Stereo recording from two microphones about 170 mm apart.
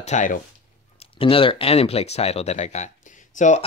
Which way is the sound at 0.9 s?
35° left (ahead or behind).